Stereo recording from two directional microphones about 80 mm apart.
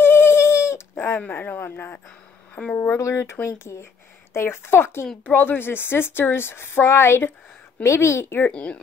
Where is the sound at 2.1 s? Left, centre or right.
Centre.